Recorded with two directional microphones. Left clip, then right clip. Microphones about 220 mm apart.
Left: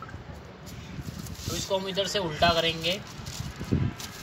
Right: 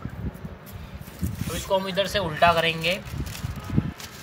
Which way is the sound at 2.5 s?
40° right (ahead or behind).